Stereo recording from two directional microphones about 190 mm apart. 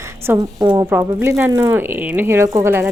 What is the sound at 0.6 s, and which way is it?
Speech, 20° right (ahead or behind).